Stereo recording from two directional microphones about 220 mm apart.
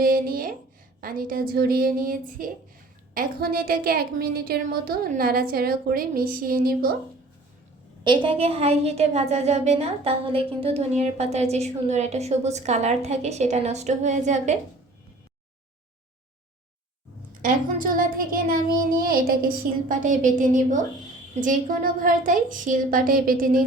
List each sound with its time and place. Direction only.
0.0 s a woman's voice: 40° right (ahead or behind)
8.0 s a woman's voice: 20° right (ahead or behind)
17.4 s a woman's voice: 40° right (ahead or behind)